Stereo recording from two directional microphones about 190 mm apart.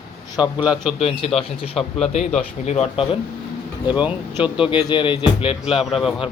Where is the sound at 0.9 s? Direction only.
30° left (ahead or behind).